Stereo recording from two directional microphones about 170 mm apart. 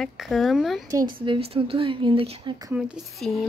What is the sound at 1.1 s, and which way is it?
Speech, 35° right (ahead or behind).